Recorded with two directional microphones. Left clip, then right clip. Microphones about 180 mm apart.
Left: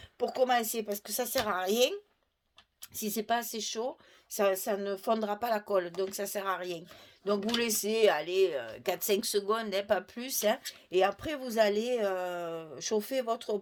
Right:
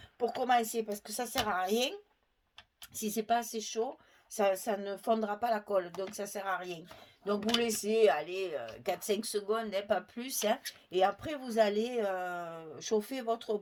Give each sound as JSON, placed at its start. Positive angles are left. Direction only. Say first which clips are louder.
{"t": 0.2, "sound": "speech", "louder": "left 1 dB", "side_deg": 45}
{"t": 2.9, "sound": "speech", "louder": "even", "side_deg": 40}